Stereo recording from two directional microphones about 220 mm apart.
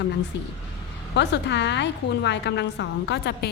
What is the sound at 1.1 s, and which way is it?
A woman's voice, 50° left (ahead or behind).